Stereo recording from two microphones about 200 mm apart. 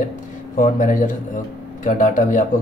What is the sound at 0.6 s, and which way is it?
Speech, 40° left (ahead or behind).